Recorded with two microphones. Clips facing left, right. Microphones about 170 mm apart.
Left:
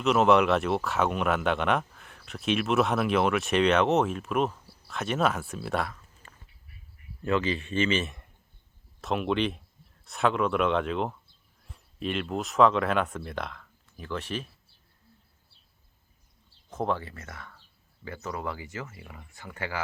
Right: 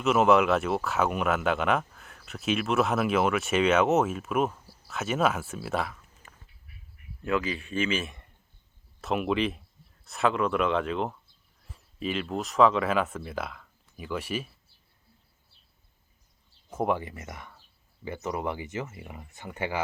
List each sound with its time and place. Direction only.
0.0 s speech: centre (ahead or behind)
16.6 s speech: 10° right (ahead or behind)